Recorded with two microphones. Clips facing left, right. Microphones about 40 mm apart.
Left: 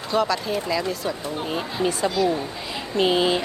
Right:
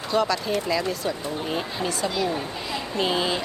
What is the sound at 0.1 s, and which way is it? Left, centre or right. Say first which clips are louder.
Speech: left 1 dB; centre.